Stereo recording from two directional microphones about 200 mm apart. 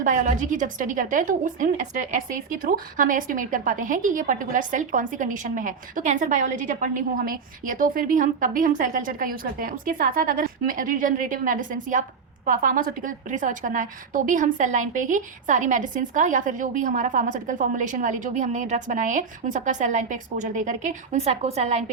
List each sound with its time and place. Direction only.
0.0 s a woman's voice: 40° right (ahead or behind)